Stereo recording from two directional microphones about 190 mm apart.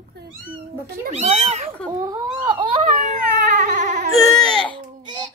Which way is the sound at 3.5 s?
40° right (ahead or behind).